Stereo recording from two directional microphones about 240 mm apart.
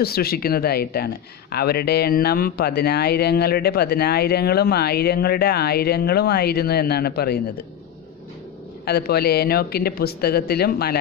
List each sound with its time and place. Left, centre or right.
0.0 s speech: left
8.8 s speech: left